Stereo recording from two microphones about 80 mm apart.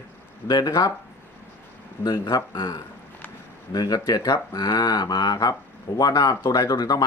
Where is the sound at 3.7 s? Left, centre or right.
Left.